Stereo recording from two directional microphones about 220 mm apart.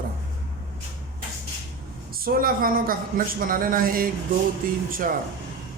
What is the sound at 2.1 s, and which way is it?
Speech, 40° right (ahead or behind).